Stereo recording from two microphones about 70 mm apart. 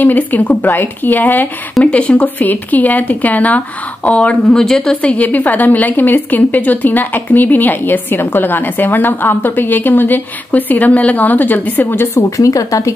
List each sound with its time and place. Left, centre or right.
0.0 s a woman's voice: left; by 4.9 s centre
5.0 s a woman's voice: left
12.2 s speech: left